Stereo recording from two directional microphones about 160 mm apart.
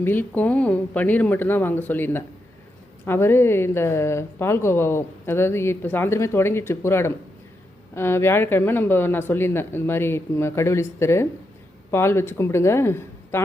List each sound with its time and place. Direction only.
0.0 s a woman's voice: 15° left (ahead or behind)